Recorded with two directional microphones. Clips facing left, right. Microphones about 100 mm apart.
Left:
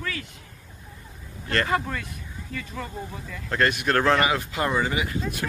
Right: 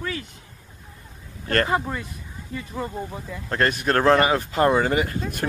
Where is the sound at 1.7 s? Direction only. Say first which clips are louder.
Right 2 dB; 20° right (ahead or behind).